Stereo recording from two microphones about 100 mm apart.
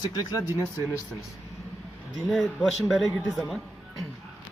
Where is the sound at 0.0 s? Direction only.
40° left (ahead or behind).